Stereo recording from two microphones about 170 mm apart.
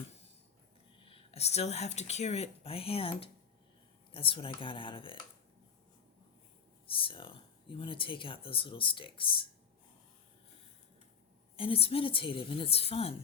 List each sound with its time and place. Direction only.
1.0 s speech: 35° left (ahead or behind)
6.8 s speech: 30° left (ahead or behind)
11.5 s speech: 35° left (ahead or behind)